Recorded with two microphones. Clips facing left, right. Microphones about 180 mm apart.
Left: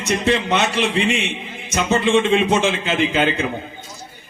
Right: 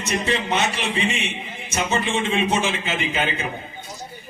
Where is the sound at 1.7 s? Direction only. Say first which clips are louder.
Left 6 dB; 65° left (ahead or behind).